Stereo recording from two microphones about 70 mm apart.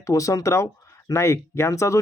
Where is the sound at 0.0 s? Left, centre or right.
Left.